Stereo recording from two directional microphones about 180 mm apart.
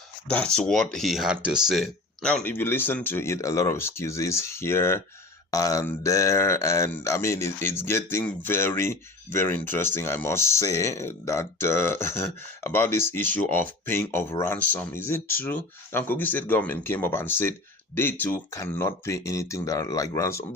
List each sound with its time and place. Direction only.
0.3 s speech: 5° left (ahead or behind)